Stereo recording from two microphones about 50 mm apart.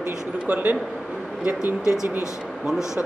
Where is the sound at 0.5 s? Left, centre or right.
Right.